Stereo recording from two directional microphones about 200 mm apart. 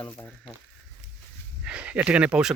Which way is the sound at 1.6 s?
5° right (ahead or behind).